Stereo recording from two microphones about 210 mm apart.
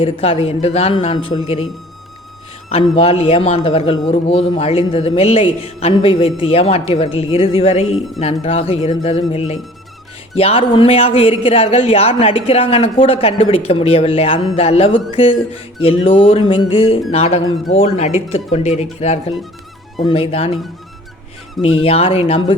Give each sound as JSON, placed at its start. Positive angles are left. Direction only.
{"t": 0.0, "sound": "a man's voice", "side_deg": 25}
{"t": 2.9, "sound": "a man's voice", "side_deg": 30}
{"t": 21.8, "sound": "a man's voice", "side_deg": 25}